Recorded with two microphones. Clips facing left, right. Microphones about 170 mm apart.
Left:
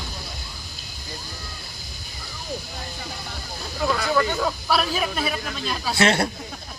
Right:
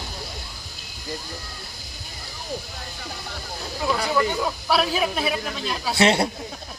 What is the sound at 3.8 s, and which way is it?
Speech, 15° right (ahead or behind).